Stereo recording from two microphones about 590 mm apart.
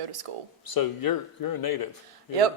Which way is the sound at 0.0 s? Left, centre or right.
Right.